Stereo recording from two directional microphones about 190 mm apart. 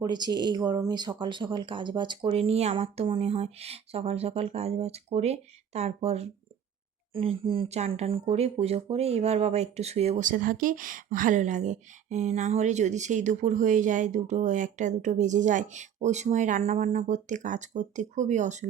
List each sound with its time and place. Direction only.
0.0 s speech: 20° right (ahead or behind); by 18.7 s 40° right (ahead or behind)